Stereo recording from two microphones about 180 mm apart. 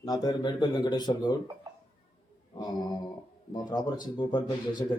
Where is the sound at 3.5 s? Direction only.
25° left (ahead or behind).